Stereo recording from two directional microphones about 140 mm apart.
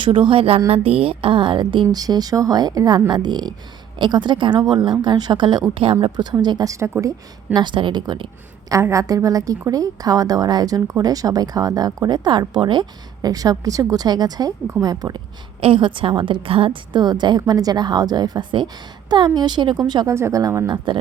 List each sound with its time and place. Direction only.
0.0 s a woman's voice: 35° right (ahead or behind); by 7.1 s 20° right (ahead or behind)
7.5 s a woman's voice: 35° right (ahead or behind)
15.6 s a woman's voice: 35° right (ahead or behind)